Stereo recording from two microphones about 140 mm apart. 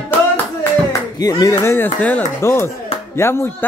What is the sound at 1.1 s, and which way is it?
Speech, 25° left (ahead or behind).